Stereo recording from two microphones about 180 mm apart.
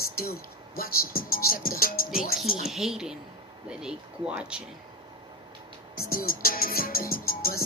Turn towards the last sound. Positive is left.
turn(degrees=55)  # may be behind; listen again after turning